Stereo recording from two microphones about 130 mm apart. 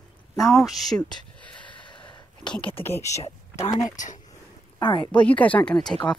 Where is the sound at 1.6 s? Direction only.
40° left (ahead or behind).